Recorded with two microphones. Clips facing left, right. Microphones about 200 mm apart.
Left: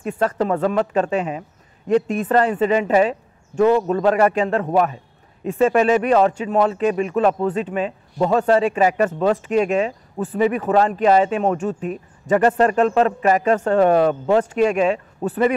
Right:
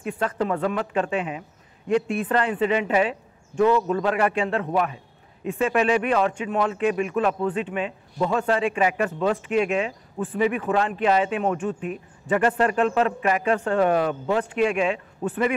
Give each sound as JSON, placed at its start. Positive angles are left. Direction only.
{"t": 0.0, "sound": "speech", "side_deg": 40}